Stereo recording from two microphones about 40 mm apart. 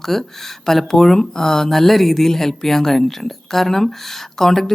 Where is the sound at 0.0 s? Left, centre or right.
Centre.